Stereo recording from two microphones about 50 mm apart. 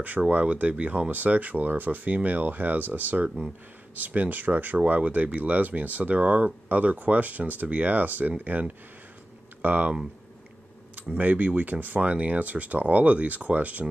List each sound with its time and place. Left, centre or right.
0.3 s speech: right
11.1 s speech: right